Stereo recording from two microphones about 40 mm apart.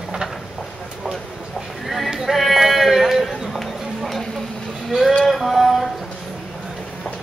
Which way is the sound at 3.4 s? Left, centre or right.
Centre.